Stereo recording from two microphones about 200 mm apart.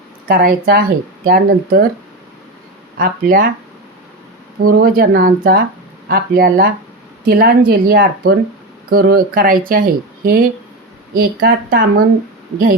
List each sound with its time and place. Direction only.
0.3 s speech: 45° right (ahead or behind)
3.0 s speech: 45° right (ahead or behind)
4.7 s speech: 45° right (ahead or behind)